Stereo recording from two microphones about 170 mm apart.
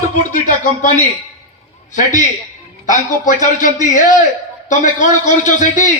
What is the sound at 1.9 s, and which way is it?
Speech, 50° left (ahead or behind).